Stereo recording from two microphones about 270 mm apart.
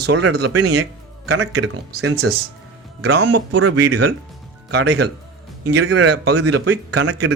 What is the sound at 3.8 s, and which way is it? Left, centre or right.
Speech, right.